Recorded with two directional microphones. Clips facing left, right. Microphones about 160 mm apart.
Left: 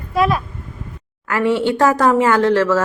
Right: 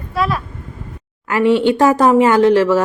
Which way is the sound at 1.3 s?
15° right (ahead or behind).